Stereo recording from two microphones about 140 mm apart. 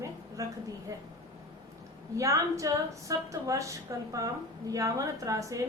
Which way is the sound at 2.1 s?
20° right (ahead or behind).